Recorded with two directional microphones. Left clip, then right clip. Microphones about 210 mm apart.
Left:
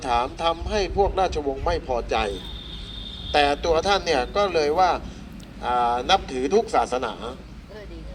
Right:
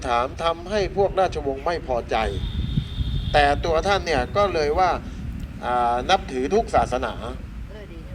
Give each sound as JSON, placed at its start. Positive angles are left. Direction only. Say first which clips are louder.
{"t": 0.0, "sound": "speech", "louder": "even", "side_deg": -30}
{"t": 3.3, "sound": "speech", "louder": "right 1 dB", "side_deg": -20}